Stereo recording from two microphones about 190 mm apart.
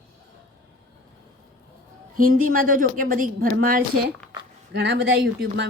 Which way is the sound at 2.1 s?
45° right (ahead or behind).